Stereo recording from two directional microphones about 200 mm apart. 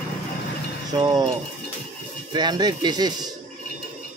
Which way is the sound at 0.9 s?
20° right (ahead or behind).